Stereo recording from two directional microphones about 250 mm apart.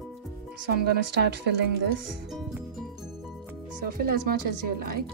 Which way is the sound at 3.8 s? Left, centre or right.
Right.